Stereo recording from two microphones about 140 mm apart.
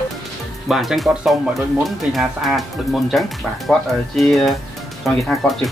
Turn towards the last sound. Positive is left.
turn(degrees=0)  # may be behind; listen again after turning